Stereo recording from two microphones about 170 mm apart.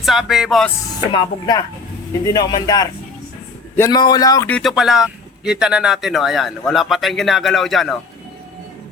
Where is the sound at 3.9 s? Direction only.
25° left (ahead or behind).